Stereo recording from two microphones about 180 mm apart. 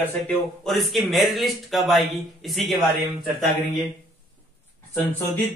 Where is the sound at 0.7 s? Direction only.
Centre (ahead or behind).